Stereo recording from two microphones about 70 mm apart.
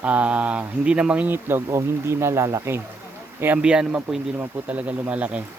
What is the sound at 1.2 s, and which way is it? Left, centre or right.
Speech, right.